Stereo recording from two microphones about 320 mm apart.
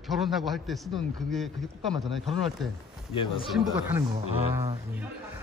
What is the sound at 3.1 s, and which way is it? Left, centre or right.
Speech, centre.